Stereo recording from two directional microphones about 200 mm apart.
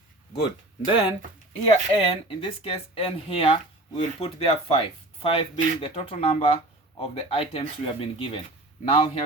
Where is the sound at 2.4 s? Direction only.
25° left (ahead or behind).